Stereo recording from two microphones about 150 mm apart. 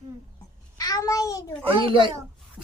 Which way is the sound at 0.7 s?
25° left (ahead or behind).